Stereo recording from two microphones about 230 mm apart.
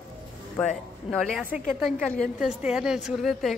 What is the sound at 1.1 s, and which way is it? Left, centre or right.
Speech, centre.